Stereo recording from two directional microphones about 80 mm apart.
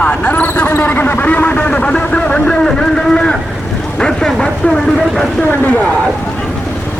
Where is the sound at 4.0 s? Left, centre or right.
Centre.